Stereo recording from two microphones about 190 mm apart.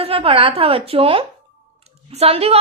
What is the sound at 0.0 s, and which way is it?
A woman's voice, 30° right (ahead or behind).